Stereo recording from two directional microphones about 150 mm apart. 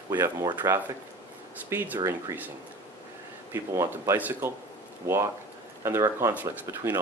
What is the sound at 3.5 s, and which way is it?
Speech, 15° right (ahead or behind).